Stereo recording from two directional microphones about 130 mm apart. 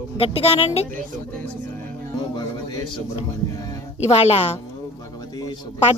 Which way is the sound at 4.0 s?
55° left (ahead or behind).